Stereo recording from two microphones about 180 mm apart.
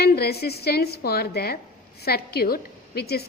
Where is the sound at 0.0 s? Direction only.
60° left (ahead or behind).